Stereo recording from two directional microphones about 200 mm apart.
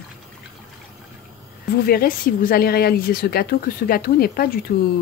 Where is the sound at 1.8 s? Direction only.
50° left (ahead or behind).